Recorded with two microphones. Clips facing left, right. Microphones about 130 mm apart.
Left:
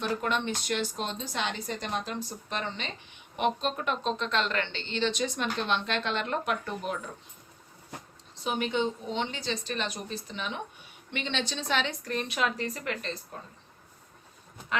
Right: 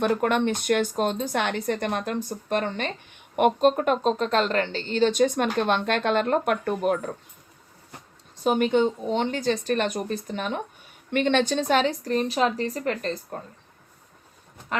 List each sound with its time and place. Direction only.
0.0 s speech: 50° right (ahead or behind)
8.4 s speech: 50° right (ahead or behind)